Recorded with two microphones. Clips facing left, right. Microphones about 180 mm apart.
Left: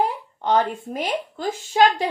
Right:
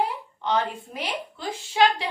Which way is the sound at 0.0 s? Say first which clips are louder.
Left 4 dB; 45° left (ahead or behind).